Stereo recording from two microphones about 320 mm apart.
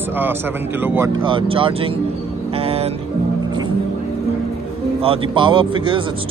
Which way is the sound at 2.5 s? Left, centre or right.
Centre.